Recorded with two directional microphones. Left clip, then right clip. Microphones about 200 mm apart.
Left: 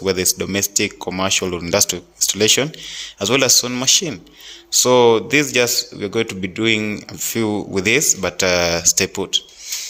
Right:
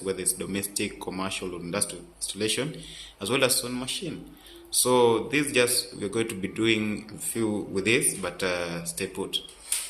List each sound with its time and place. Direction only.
0.0 s speech: 45° left (ahead or behind)